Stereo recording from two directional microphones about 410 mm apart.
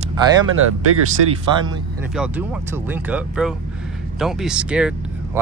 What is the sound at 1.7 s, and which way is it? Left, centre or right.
Speech, centre.